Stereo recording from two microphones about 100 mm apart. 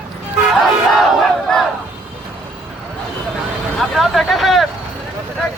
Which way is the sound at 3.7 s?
Centre (ahead or behind).